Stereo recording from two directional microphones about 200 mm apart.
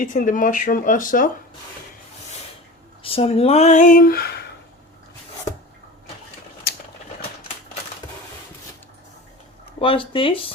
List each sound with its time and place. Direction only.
0.0 s speech: 40° left (ahead or behind)
3.0 s speech: 30° left (ahead or behind); by 4.4 s 50° left (ahead or behind)
9.8 s speech: 25° left (ahead or behind)